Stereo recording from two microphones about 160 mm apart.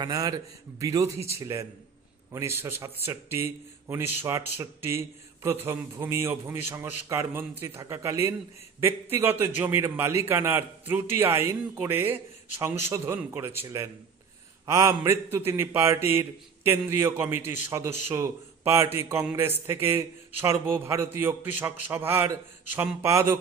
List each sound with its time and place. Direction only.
0.0 s a man's voice: 20° right (ahead or behind)